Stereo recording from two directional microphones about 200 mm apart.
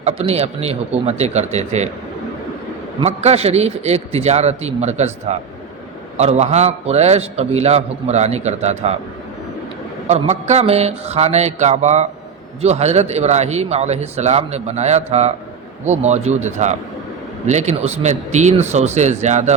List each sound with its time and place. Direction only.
0.0 s a man's voice: 30° right (ahead or behind)
3.0 s a man's voice: 35° right (ahead or behind)
10.1 s a man's voice: 35° right (ahead or behind)